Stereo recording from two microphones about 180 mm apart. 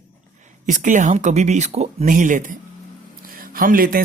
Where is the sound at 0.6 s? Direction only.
45° right (ahead or behind).